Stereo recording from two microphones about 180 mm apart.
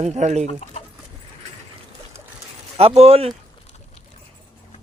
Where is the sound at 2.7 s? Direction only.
35° right (ahead or behind).